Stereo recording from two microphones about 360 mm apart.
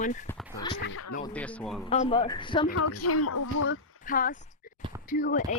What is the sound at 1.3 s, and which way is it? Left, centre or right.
Speech, centre.